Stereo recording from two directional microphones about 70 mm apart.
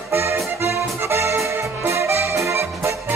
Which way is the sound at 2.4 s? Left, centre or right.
Right.